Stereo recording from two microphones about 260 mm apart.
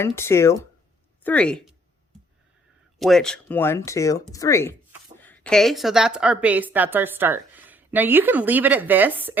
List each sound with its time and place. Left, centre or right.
0.0 s speech: centre
3.0 s a woman's voice: centre